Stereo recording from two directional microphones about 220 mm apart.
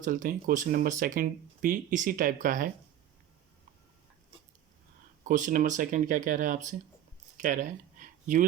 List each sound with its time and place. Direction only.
0.0 s speech: 35° right (ahead or behind)
5.3 s speech: 35° right (ahead or behind)
7.3 s a sound: 35° right (ahead or behind)